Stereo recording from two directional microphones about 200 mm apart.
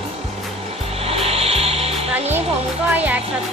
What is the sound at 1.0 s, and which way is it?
Music, 30° right (ahead or behind).